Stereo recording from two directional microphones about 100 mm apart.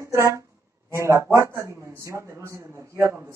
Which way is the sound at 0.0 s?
30° right (ahead or behind).